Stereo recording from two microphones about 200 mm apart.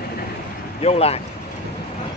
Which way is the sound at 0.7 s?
30° left (ahead or behind).